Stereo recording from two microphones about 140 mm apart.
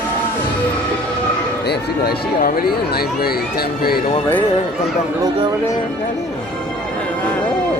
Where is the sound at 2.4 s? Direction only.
90° left.